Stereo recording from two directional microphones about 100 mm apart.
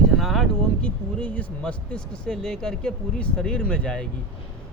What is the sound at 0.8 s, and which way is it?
Speech, 10° left (ahead or behind).